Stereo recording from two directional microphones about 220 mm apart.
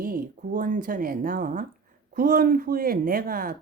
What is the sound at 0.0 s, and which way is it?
A woman's voice, 40° right (ahead or behind).